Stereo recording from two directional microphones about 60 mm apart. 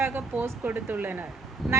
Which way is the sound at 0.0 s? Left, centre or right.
Right.